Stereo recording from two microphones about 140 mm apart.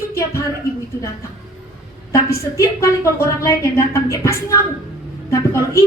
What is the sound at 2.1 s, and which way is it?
A woman's voice, 20° left (ahead or behind).